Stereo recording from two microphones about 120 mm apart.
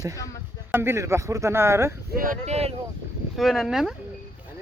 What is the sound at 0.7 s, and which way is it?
Speech, 20° right (ahead or behind).